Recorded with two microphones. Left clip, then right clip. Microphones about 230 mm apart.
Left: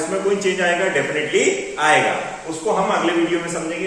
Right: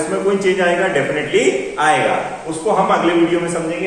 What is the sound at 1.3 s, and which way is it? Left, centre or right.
Speech, left.